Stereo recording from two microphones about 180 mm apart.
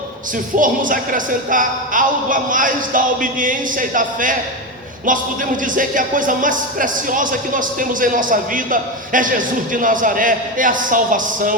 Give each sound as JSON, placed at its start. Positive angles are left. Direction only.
{"t": 0.5, "sound": "music", "side_deg": -50}